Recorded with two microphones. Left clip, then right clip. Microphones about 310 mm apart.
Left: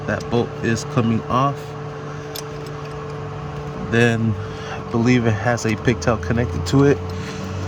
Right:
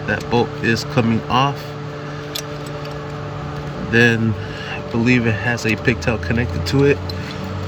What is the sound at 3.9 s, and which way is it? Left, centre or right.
Speech, centre.